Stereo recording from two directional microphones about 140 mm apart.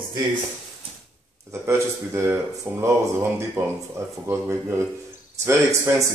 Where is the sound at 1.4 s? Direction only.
20° right (ahead or behind).